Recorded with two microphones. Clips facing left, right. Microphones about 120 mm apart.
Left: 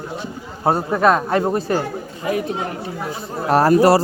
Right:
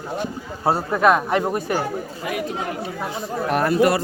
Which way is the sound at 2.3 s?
30° left (ahead or behind).